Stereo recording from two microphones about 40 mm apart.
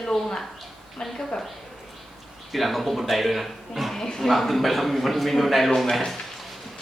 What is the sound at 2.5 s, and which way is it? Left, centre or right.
A man's voice, centre.